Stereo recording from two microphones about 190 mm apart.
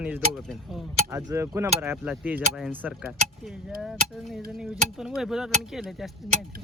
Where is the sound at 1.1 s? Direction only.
15° right (ahead or behind).